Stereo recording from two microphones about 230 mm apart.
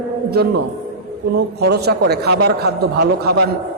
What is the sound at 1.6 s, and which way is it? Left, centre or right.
A man's voice, right.